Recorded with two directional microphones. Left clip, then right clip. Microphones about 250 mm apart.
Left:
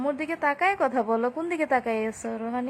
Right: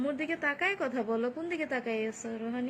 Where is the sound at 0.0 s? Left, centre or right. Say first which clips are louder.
Left 6 dB; left.